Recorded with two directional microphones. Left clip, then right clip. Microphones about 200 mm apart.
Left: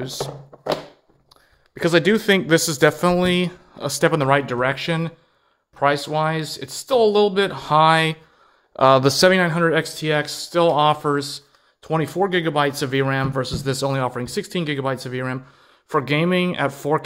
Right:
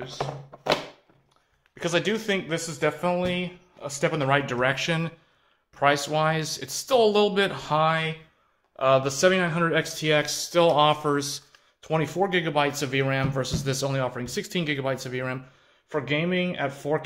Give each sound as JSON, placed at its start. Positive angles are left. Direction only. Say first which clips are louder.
{"t": 1.8, "sound": "a man's voice", "louder": "left 8 dB", "side_deg": 40}
{"t": 15.9, "sound": "speech", "louder": "left 7 dB", "side_deg": 40}